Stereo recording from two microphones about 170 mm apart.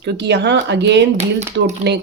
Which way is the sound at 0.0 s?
90° right.